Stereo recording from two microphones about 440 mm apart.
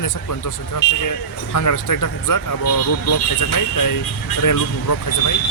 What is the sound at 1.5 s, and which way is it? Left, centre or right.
Speech, left.